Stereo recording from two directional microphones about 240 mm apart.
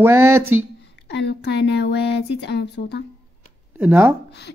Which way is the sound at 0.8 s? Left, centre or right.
Left.